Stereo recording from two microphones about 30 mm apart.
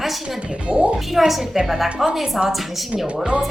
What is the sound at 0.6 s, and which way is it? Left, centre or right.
Speech, right.